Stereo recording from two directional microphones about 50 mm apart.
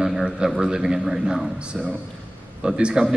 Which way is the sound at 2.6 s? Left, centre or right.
Centre.